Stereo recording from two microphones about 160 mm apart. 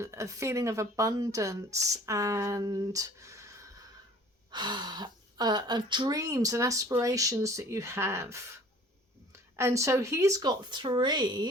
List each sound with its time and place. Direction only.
0.0 s speech: 20° right (ahead or behind)
9.6 s speech: 15° right (ahead or behind)